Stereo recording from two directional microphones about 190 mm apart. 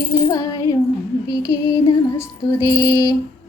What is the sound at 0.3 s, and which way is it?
Female singing, 20° left (ahead or behind).